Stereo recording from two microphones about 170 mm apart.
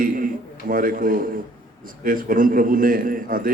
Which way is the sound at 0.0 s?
55° right (ahead or behind).